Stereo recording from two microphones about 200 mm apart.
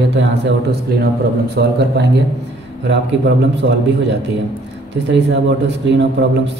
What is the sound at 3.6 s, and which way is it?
Speech, 60° right (ahead or behind).